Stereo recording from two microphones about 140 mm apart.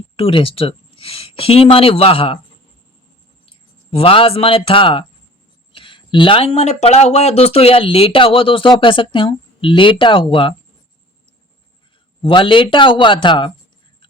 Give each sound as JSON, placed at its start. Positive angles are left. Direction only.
{"t": 0.2, "sound": "speech", "side_deg": 40}
{"t": 3.4, "sound": "speech", "side_deg": 40}
{"t": 12.2, "sound": "speech", "side_deg": 35}